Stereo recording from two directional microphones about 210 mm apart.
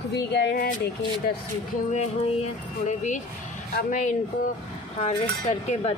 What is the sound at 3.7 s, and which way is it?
A woman's voice, 35° left (ahead or behind).